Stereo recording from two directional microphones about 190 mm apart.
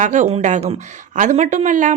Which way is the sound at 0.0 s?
40° right (ahead or behind).